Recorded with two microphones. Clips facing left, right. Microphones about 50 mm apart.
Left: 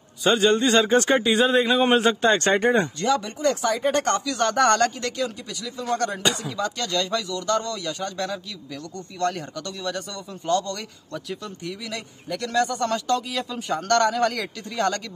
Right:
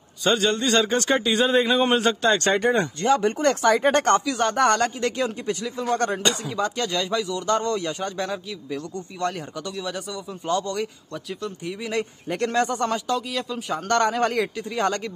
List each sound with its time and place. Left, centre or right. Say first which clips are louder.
0.2 s speech: left 3 dB; centre
2.2 s speech: left 1 dB; left
3.0 s a man's voice: right 3 dB; right
3.3 s speech: right 3 dB; right
4.4 s speech: left 1 dB; centre
5.0 s a man's voice: right 4 dB; right
6.5 s a man's voice: right 1 dB; centre
8.2 s speech: right 1 dB; centre
11.9 s a man's voice: right 5 dB; right
12.9 s speech: left 1 dB; centre
13.8 s speech: left 1 dB; centre
14.1 s a man's voice: even; right
14.4 s speech: right 1 dB; centre